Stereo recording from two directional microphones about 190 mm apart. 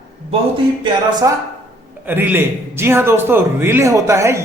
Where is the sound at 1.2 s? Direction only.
15° right (ahead or behind).